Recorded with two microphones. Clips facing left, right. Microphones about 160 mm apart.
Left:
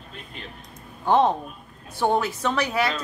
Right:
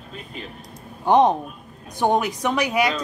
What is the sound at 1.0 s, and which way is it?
A woman's voice, 15° right (ahead or behind).